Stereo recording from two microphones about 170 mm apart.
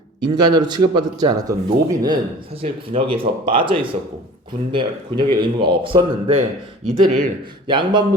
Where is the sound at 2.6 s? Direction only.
35° right (ahead or behind).